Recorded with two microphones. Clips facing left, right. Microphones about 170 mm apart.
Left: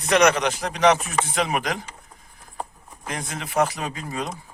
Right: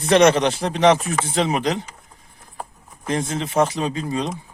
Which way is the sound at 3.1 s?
25° right (ahead or behind).